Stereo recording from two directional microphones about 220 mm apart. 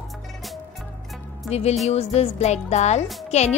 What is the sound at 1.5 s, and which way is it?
Speech, 30° left (ahead or behind).